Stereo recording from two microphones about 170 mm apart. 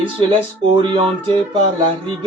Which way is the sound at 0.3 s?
30° right (ahead or behind).